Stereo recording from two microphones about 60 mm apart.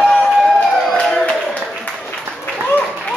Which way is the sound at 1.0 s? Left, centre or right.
Centre.